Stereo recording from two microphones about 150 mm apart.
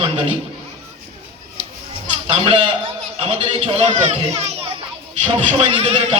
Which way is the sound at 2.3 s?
40° right (ahead or behind).